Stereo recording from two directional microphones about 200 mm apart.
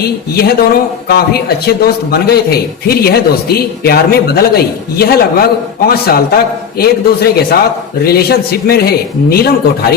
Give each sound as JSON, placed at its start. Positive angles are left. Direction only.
{"t": 0.0, "sound": "a man's voice", "side_deg": 50}